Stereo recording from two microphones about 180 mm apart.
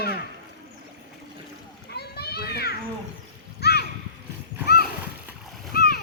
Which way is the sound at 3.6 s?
60° left (ahead or behind).